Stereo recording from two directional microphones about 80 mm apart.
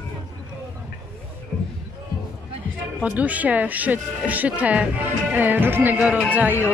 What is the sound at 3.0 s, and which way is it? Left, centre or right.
Speech, centre.